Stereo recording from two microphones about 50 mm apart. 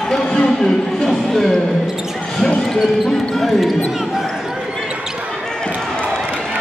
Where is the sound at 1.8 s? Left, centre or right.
Centre.